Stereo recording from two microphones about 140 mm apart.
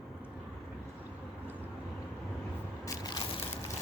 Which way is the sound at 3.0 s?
30° left (ahead or behind).